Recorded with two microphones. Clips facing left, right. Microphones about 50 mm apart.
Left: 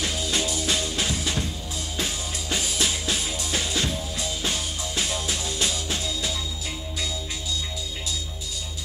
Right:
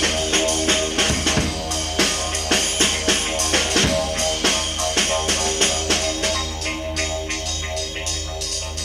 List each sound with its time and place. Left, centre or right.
0.0 s music: right